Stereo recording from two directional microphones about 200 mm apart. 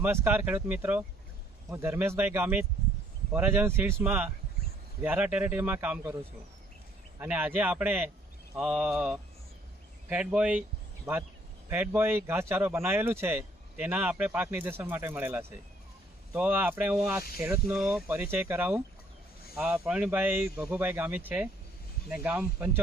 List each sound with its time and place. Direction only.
0.0 s speech: 10° right (ahead or behind)
7.2 s speech: 10° right (ahead or behind)